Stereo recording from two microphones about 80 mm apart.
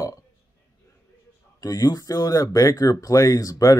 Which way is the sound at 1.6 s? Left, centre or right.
Left.